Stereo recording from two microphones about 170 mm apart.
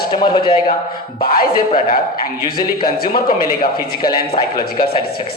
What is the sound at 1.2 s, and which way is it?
Speech, 60° left (ahead or behind).